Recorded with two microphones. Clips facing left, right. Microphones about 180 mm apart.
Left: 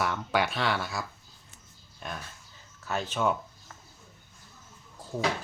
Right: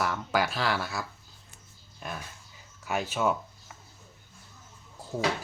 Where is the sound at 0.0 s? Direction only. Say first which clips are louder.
Even; centre (ahead or behind).